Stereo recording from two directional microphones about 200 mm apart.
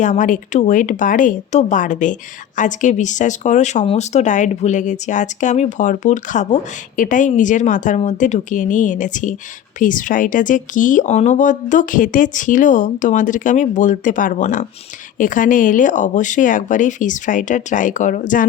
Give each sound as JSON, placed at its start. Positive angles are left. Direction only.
{"t": 0.0, "sound": "speech", "side_deg": 40}